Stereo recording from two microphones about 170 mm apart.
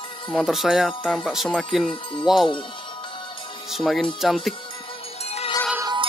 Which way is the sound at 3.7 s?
Centre (ahead or behind).